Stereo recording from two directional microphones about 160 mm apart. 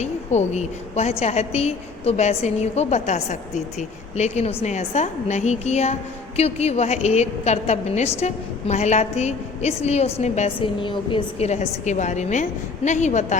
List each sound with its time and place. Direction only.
0.0 s a woman's voice: 45° left (ahead or behind)
10.6 s a woman's voice: 30° left (ahead or behind)